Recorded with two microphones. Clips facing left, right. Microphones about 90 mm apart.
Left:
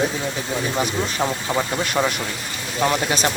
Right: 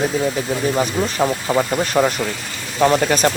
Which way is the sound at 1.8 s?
40° right (ahead or behind).